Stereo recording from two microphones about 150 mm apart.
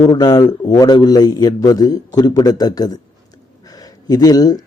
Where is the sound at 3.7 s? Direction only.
25° left (ahead or behind).